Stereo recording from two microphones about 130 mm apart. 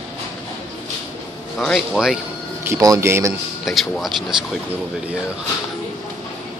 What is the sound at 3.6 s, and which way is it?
Speech, centre (ahead or behind).